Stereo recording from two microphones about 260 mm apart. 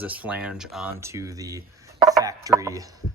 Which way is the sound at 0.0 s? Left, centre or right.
Centre.